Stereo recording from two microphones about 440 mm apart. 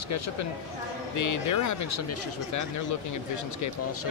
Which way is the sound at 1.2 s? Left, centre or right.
Left.